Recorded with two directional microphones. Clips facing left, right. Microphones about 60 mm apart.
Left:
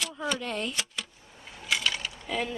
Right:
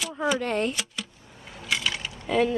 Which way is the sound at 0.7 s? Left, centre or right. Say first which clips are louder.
Right 2 dB; centre.